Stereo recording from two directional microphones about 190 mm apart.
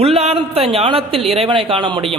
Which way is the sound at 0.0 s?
35° right (ahead or behind).